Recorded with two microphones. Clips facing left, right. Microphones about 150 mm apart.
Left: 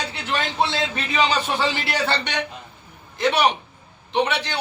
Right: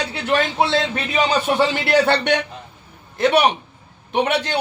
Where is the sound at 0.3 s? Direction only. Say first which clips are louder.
Right 5 dB; 60° right (ahead or behind).